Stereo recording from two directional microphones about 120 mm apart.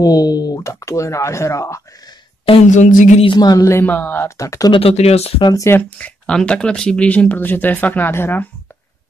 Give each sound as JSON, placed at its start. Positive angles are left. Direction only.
{"t": 0.0, "sound": "speech", "side_deg": 35}
{"t": 2.6, "sound": "a sound", "side_deg": 90}
{"t": 3.3, "sound": "speech", "side_deg": 30}
{"t": 4.4, "sound": "speech", "side_deg": 30}
{"t": 4.7, "sound": "speech", "side_deg": 55}
{"t": 5.6, "sound": "speech", "side_deg": 15}